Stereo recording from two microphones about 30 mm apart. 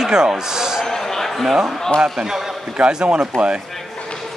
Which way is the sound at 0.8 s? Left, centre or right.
Centre.